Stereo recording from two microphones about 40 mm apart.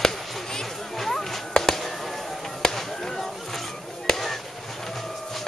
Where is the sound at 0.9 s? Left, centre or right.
Centre.